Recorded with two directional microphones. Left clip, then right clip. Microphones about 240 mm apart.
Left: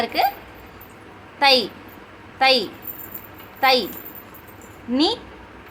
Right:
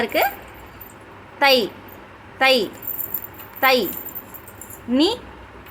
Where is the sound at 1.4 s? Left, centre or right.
Centre.